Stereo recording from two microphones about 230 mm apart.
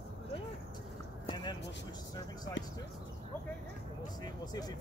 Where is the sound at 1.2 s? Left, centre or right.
Centre.